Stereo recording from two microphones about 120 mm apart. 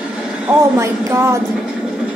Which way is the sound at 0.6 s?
25° right (ahead or behind).